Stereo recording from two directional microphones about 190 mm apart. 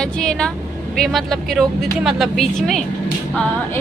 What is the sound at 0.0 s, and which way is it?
Speech, 5° left (ahead or behind).